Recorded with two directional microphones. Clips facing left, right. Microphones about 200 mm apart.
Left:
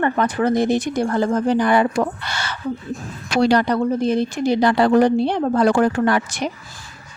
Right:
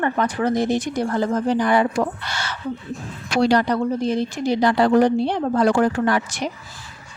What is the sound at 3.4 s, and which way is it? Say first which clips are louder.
Speech: left 2 dB; 60° left (ahead or behind).